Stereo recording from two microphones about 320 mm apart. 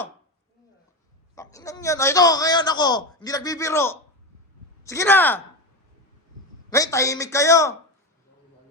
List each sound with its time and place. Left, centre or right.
1.4 s a man's voice: centre
6.7 s a man's voice: centre